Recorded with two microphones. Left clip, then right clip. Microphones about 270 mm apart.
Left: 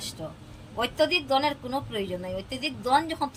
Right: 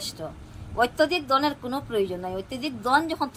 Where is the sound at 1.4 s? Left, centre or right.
Centre.